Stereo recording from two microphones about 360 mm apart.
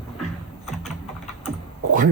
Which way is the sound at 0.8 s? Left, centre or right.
Centre.